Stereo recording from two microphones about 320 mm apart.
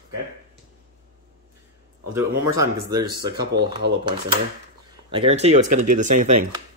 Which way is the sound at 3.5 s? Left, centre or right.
Right.